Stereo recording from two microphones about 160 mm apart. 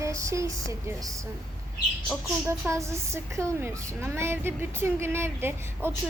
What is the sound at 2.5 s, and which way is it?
A woman's voice, 15° right (ahead or behind).